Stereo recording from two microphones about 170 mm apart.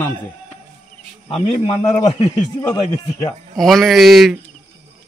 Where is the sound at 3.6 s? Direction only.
Centre (ahead or behind).